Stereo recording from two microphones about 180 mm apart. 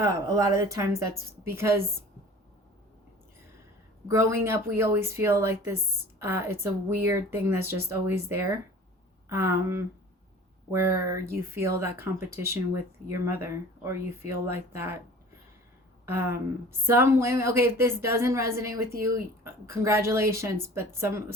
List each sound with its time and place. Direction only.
0.0 s a woman's voice: 20° right (ahead or behind)
4.1 s a woman's voice: 15° right (ahead or behind)
16.0 s a woman's voice: 15° right (ahead or behind)